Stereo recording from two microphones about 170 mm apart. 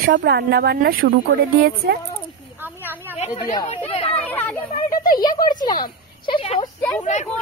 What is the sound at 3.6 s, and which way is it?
Chatter, 35° left (ahead or behind).